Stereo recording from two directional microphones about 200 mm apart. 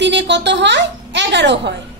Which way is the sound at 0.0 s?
60° right (ahead or behind).